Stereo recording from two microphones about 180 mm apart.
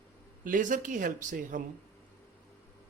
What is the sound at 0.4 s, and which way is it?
Speech, 45° right (ahead or behind).